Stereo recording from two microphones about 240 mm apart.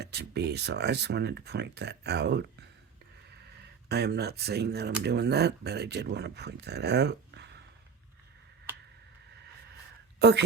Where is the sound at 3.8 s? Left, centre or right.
Right.